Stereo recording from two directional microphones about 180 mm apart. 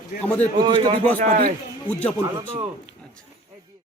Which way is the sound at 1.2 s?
45° right (ahead or behind).